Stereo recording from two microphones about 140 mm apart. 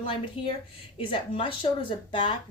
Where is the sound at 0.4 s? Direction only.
40° left (ahead or behind).